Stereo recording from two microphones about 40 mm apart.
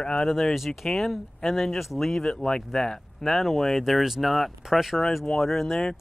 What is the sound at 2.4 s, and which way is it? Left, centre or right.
Speech, centre.